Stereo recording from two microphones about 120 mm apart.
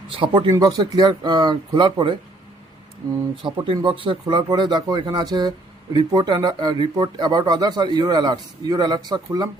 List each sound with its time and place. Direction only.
0.2 s speech: 40° right (ahead or behind)
3.4 s speech: 45° right (ahead or behind)